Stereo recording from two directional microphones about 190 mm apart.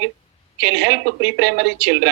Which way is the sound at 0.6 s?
65° right (ahead or behind).